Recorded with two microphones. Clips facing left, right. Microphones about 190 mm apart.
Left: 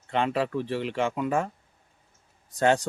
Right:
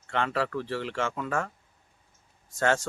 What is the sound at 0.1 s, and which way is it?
Speech, 15° left (ahead or behind).